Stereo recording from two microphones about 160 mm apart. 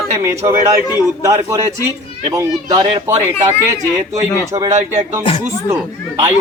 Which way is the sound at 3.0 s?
15° right (ahead or behind).